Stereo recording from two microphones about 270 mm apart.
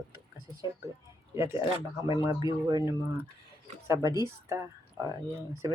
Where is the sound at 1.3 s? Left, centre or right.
Centre.